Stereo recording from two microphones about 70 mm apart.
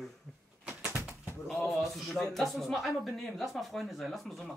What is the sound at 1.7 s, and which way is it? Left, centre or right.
A man's voice, centre.